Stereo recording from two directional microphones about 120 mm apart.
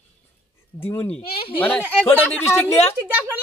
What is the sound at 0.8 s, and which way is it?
Speech, 15° left (ahead or behind).